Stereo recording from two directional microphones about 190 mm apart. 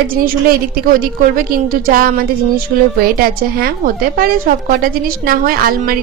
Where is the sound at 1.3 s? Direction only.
45° right (ahead or behind).